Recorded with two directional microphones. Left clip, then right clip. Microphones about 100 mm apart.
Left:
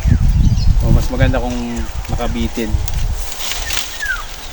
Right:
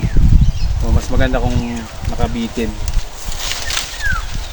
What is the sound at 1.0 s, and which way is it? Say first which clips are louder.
Speech: right 1 dB; 15° right (ahead or behind).